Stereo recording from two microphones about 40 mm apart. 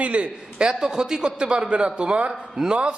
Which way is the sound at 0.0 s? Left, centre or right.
Right.